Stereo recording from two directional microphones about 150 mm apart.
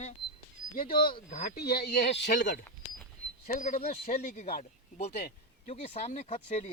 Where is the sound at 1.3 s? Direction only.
60° left (ahead or behind).